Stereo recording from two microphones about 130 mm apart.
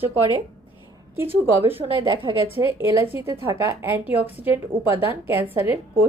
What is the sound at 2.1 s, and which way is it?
Speech, 40° right (ahead or behind).